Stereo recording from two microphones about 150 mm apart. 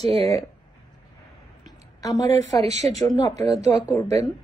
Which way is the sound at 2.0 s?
25° left (ahead or behind).